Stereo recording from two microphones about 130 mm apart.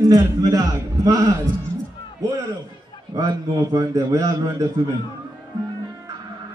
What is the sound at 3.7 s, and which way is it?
Speech, 25° right (ahead or behind).